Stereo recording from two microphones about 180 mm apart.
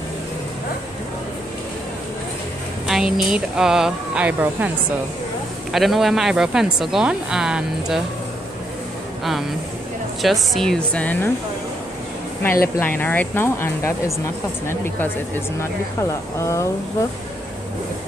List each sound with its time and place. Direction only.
2.9 s speech: centre (ahead or behind)
5.7 s speech: centre (ahead or behind)
10.2 s speech: centre (ahead or behind)
12.7 s speech: 10° left (ahead or behind)
16.3 s speech: 15° left (ahead or behind)